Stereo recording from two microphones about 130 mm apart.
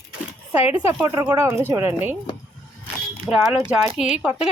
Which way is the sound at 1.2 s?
15° right (ahead or behind).